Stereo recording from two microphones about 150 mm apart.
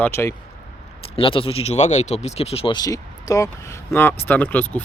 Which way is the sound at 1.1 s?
35° left (ahead or behind).